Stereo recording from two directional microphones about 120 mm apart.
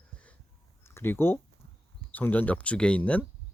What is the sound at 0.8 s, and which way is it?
Speech, 20° left (ahead or behind).